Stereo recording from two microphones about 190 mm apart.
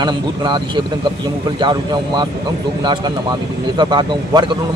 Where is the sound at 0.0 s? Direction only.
25° right (ahead or behind).